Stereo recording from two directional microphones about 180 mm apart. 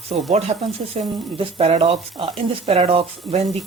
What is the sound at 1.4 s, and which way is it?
Speech, 35° right (ahead or behind).